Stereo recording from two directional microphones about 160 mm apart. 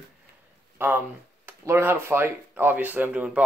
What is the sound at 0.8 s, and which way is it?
Speech, 10° right (ahead or behind).